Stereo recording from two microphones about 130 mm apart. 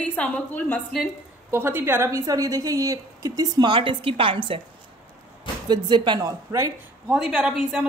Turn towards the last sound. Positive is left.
turn(degrees=-5)  # may be behind; listen again after turning